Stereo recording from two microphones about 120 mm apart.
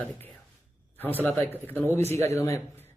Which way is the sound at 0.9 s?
15° left (ahead or behind).